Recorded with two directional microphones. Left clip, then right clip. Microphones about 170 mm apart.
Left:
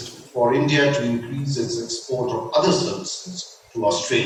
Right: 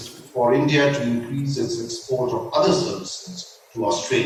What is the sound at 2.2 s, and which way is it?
Speech, 30° left (ahead or behind).